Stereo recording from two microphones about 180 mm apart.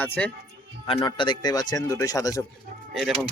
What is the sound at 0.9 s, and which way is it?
Speech, 25° left (ahead or behind).